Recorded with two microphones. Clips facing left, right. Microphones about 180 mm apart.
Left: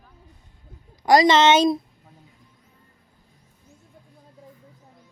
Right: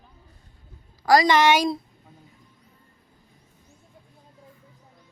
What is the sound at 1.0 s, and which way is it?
Speech, 20° left (ahead or behind).